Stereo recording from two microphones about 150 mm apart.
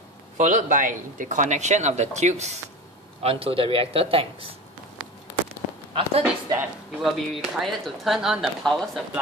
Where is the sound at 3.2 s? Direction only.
40° right (ahead or behind).